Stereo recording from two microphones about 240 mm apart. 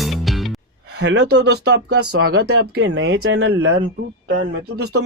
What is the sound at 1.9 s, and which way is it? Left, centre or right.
Speech, right.